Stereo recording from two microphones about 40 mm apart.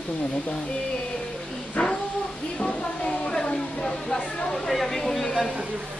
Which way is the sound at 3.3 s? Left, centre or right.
Centre.